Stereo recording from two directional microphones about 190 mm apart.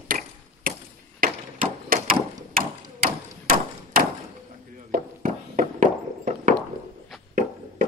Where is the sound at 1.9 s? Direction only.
50° right (ahead or behind).